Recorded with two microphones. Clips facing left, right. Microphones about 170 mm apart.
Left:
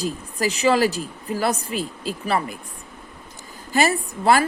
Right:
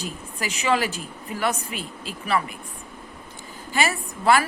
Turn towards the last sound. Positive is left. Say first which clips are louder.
# left 2 dB
turn(degrees=40)  # may be behind; listen again after turning